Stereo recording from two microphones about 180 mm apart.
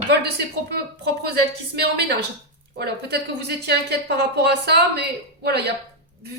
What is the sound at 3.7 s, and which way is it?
A woman's voice, 70° right (ahead or behind).